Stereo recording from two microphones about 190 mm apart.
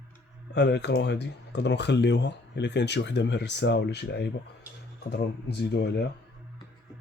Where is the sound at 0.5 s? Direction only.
60° left (ahead or behind).